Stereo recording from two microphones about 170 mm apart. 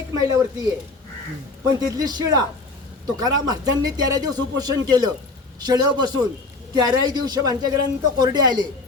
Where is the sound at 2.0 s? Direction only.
20° right (ahead or behind).